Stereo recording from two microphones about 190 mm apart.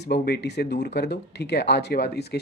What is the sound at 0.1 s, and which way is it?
Speech, 60° left (ahead or behind).